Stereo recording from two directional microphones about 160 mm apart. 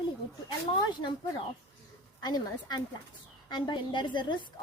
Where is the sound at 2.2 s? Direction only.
25° left (ahead or behind).